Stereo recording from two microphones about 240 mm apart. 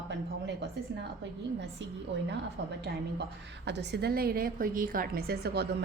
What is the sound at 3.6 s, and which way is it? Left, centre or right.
A woman's voice, right.